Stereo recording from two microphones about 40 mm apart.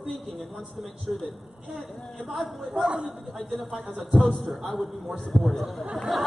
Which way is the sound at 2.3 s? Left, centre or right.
Centre.